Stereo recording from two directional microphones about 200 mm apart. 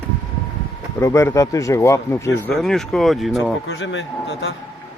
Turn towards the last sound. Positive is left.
turn(degrees=70)  # may be behind; listen again after turning